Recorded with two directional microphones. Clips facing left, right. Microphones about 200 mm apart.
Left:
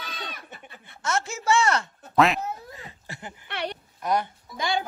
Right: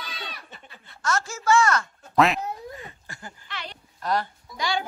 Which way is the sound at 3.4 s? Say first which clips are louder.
Left 9 dB; 60° left (ahead or behind).